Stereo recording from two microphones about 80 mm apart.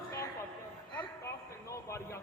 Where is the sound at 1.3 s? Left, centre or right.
Left.